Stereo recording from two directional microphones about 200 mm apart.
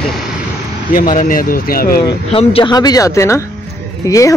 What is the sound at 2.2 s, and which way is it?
Speech, 30° left (ahead or behind).